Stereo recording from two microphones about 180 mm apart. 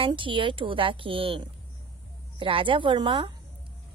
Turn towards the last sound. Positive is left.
turn(degrees=-25)  # may be behind; listen again after turning